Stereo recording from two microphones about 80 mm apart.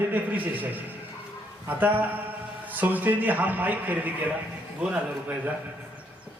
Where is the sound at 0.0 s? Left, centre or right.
Right.